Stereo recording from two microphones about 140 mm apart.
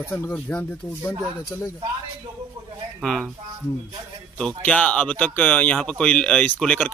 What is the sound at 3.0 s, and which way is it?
Speech, 5° left (ahead or behind).